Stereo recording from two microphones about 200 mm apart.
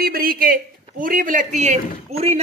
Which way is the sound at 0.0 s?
45° right (ahead or behind).